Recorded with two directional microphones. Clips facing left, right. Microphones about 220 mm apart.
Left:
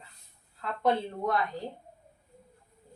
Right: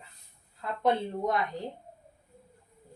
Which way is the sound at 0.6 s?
20° right (ahead or behind).